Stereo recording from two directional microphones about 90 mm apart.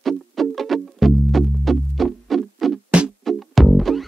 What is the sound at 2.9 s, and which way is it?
Music, 15° right (ahead or behind).